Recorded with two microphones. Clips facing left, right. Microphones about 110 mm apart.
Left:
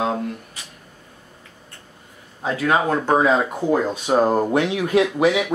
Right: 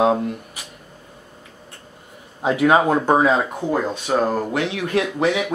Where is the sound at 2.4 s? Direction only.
15° right (ahead or behind).